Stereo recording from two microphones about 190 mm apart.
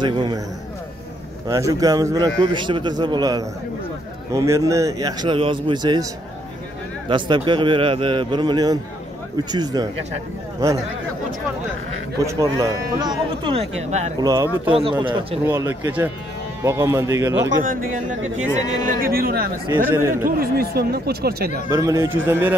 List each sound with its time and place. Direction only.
0.0 s a man's voice: 25° right (ahead or behind)
1.5 s a man's voice: 15° right (ahead or behind)
7.1 s a man's voice: 25° right (ahead or behind)
12.3 s a man's voice: 15° right (ahead or behind); by 14.1 s 35° right (ahead or behind)
14.2 s a man's voice: 15° right (ahead or behind)
18.5 s speech: 45° right (ahead or behind)
19.9 s speech: 15° right (ahead or behind)
20.2 s speech: 50° right (ahead or behind)
21.6 s speech: 15° right (ahead or behind)